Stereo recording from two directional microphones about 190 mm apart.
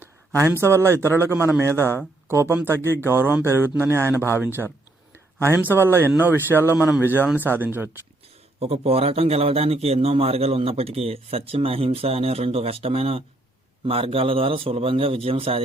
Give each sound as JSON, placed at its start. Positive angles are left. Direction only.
{"t": 0.0, "sound": "speech", "side_deg": -10}
{"t": 8.5, "sound": "a man's voice", "side_deg": -30}